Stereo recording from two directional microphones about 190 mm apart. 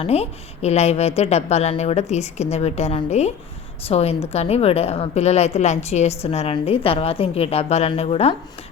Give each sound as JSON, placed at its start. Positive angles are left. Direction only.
{"t": 0.0, "sound": "a woman's voice", "side_deg": 35}